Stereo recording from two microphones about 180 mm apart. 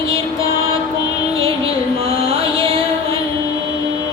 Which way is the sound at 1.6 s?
30° right (ahead or behind).